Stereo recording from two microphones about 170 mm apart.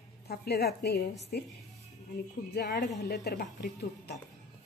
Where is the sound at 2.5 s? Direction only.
70° left (ahead or behind).